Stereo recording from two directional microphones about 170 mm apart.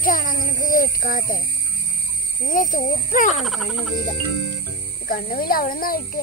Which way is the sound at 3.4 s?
Centre (ahead or behind).